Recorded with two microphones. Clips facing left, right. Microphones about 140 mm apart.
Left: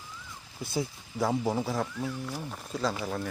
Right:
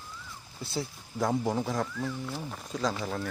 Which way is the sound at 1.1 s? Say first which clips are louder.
Even; 5° left (ahead or behind).